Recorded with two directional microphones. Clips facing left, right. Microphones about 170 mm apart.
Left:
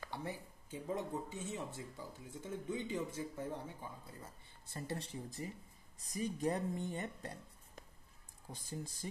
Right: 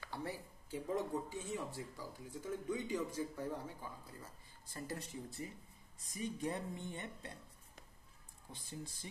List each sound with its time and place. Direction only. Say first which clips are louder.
0.1 s speech: right 2 dB; 20° left (ahead or behind)
4.7 s speech: left 2 dB; 30° left (ahead or behind)
6.0 s speech: left 4 dB; 40° left (ahead or behind)